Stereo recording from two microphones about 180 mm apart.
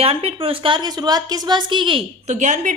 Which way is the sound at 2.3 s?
40° right (ahead or behind).